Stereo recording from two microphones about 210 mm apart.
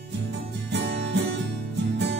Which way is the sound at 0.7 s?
55° right (ahead or behind).